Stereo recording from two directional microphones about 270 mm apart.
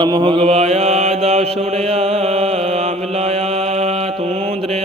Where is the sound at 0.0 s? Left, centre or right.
Centre.